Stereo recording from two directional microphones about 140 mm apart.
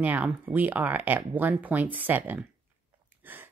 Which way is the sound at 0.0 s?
10° right (ahead or behind).